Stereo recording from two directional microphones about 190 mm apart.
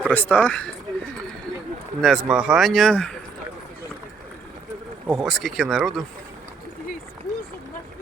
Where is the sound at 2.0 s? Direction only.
Centre (ahead or behind).